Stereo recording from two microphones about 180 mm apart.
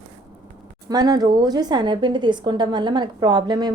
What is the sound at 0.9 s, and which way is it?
Speech, 20° right (ahead or behind).